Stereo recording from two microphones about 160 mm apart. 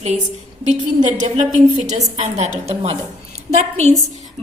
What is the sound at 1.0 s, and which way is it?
Speech, 50° right (ahead or behind).